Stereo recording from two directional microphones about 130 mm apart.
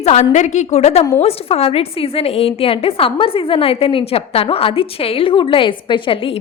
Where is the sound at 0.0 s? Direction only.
60° left (ahead or behind).